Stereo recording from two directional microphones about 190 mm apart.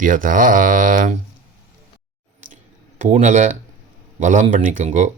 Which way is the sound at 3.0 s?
40° right (ahead or behind).